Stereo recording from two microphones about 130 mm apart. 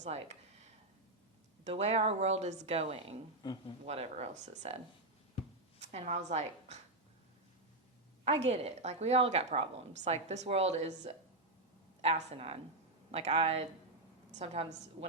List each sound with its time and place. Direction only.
0.0 s a sound: 60° right (ahead or behind)
1.7 s speech: 55° right (ahead or behind)
3.4 s speech: 35° left (ahead or behind)
3.8 s speech: 50° right (ahead or behind)
5.8 s a woman's voice: 60° right (ahead or behind)
8.2 s a woman's voice: 55° right (ahead or behind)
9.9 s a woman's voice: 60° right (ahead or behind)